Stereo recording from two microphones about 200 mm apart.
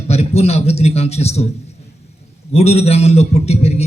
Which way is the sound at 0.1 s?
30° left (ahead or behind).